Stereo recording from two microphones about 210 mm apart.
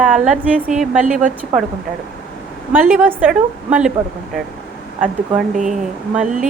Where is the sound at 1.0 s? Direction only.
40° right (ahead or behind).